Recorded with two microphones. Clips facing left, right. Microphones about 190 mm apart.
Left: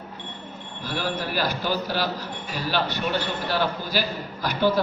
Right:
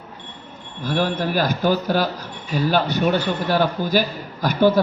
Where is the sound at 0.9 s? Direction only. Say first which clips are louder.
Right 7 dB; 45° right (ahead or behind).